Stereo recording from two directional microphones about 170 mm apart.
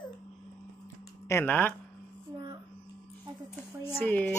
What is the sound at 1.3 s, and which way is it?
Speech, 15° left (ahead or behind).